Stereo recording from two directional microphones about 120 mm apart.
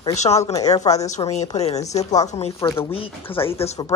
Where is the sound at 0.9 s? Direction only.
70° left (ahead or behind).